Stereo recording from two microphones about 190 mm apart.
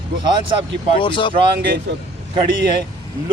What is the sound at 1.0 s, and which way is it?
Speech, 25° left (ahead or behind).